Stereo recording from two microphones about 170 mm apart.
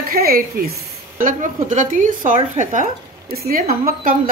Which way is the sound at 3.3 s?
65° right (ahead or behind).